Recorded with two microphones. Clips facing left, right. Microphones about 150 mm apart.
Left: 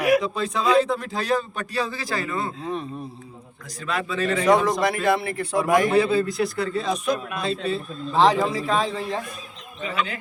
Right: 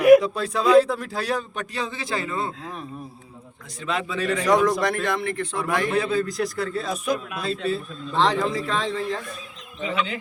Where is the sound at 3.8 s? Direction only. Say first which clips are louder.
Even; 20° right (ahead or behind).